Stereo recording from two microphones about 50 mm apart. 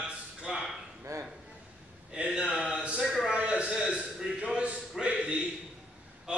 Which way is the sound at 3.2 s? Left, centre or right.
Right.